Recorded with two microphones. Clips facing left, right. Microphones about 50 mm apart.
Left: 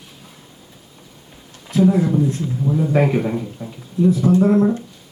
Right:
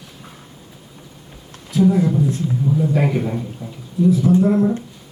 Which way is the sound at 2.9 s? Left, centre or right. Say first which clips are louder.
Left 2 dB; left.